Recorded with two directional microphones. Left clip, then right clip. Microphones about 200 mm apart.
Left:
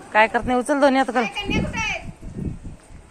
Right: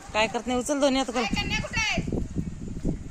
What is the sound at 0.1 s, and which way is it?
Speech, 10° right (ahead or behind).